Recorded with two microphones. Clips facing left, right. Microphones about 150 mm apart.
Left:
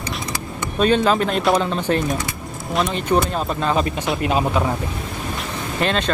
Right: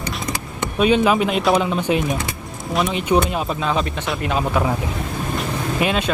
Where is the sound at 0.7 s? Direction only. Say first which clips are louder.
Right 1 dB; 10° right (ahead or behind).